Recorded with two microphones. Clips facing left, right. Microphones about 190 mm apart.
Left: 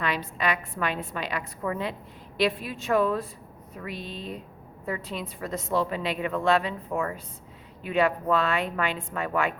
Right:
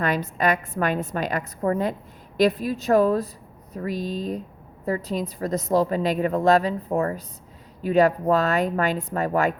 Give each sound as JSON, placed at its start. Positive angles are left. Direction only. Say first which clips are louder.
{"t": 0.0, "sound": "a woman's voice", "louder": "right 5 dB", "side_deg": -45}